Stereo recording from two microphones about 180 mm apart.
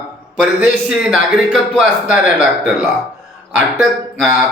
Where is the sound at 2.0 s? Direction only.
5° right (ahead or behind).